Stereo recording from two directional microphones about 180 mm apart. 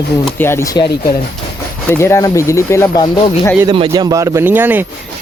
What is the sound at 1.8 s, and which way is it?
Speech, 15° left (ahead or behind).